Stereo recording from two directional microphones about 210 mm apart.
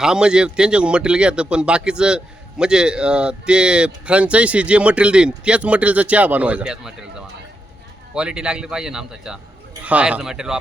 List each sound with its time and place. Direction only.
0.0 s a man's voice: 5° right (ahead or behind)
8.1 s a man's voice: 5° right (ahead or behind)